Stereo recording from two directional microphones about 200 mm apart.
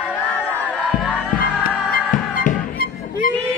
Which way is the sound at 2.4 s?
45° left (ahead or behind).